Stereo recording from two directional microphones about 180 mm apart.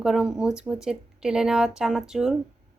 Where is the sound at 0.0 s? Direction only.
5° right (ahead or behind).